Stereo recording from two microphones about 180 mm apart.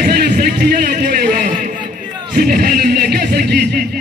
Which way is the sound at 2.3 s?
55° right (ahead or behind).